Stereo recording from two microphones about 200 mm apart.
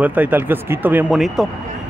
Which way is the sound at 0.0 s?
10° right (ahead or behind).